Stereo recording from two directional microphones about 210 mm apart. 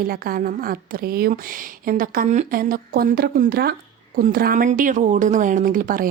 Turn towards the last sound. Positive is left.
turn(degrees=-40)  # may be behind; listen again after turning